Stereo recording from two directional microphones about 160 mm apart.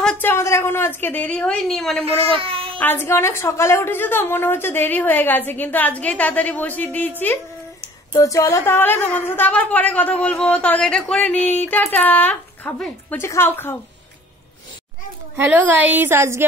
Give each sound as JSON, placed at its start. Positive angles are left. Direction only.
{"t": 0.0, "sound": "a woman's voice", "side_deg": 10}
{"t": 2.0, "sound": "speech", "side_deg": -35}
{"t": 2.8, "sound": "a woman's voice", "side_deg": 15}
{"t": 15.3, "sound": "a woman's voice", "side_deg": -10}